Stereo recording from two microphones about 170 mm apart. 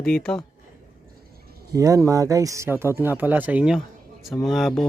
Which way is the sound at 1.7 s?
20° right (ahead or behind).